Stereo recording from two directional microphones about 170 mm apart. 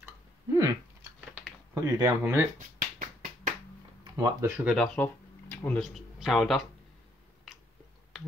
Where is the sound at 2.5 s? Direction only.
55° right (ahead or behind).